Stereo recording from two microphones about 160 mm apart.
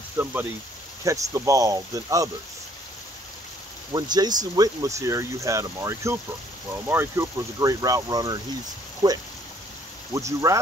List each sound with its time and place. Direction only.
0.2 s speech: 15° right (ahead or behind)
3.9 s speech: 25° right (ahead or behind)